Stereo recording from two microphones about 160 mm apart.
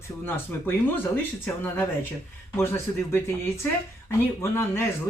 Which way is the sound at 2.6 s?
15° left (ahead or behind).